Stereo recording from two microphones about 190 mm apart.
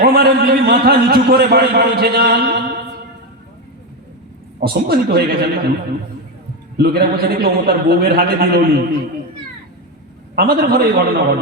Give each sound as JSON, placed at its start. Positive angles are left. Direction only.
{"t": 0.0, "sound": "a man's voice", "side_deg": -55}
{"t": 4.6, "sound": "a man's voice", "side_deg": -55}
{"t": 6.7, "sound": "a man's voice", "side_deg": -55}
{"t": 10.3, "sound": "a man's voice", "side_deg": -55}